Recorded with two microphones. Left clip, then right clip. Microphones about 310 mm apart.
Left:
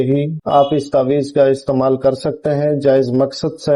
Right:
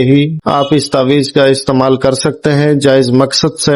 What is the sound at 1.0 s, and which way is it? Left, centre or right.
Speech, right.